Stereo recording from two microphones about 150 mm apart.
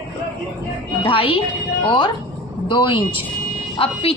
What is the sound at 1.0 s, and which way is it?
Speech, 35° left (ahead or behind).